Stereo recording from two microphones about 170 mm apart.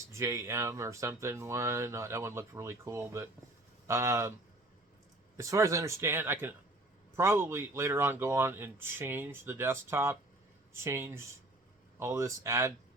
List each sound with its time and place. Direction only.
0.1 s speech: 15° right (ahead or behind)
5.4 s speech: 20° right (ahead or behind)